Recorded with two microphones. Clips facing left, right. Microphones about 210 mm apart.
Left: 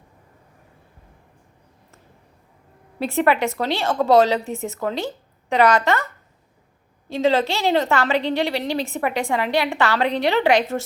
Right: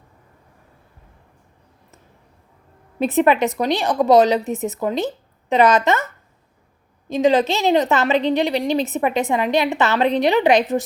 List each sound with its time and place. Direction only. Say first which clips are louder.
3.0 s a woman's voice: right 3 dB; 20° right (ahead or behind)
7.1 s a woman's voice: right 3 dB; 15° right (ahead or behind)